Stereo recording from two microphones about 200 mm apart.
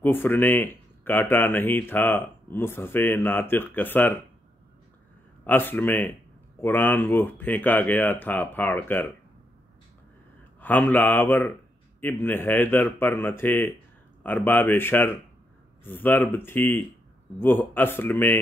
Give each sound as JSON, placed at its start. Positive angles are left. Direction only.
{"t": 0.0, "sound": "speech", "side_deg": 10}
{"t": 5.4, "sound": "speech", "side_deg": 10}
{"t": 10.6, "sound": "speech", "side_deg": 10}